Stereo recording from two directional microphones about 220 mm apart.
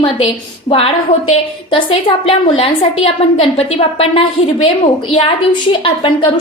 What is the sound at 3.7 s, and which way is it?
Speech, 25° left (ahead or behind).